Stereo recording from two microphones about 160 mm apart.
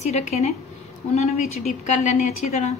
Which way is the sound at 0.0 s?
45° left (ahead or behind).